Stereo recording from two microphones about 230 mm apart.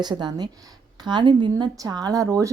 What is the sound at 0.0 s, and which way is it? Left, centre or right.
Speech, centre.